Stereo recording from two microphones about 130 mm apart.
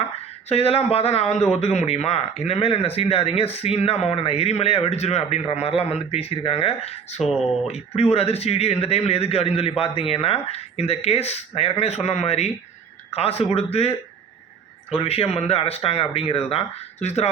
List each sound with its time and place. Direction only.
0.4 s a man's voice: 50° left (ahead or behind)
7.2 s speech: centre (ahead or behind)
7.7 s a man's voice: 50° left (ahead or behind)